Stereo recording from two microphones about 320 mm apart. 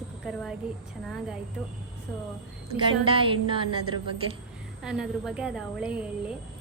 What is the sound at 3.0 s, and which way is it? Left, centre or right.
Music, centre.